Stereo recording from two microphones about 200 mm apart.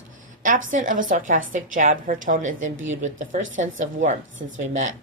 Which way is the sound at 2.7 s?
75° right (ahead or behind).